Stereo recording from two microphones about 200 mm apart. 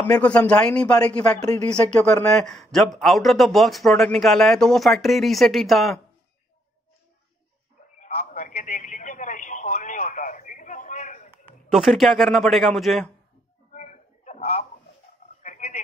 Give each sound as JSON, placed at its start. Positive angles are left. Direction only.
{"t": 0.0, "sound": "a man's voice", "side_deg": 5}
{"t": 8.0, "sound": "telephone", "side_deg": 35}
{"t": 11.7, "sound": "speech", "side_deg": 0}
{"t": 13.7, "sound": "a sound", "side_deg": 40}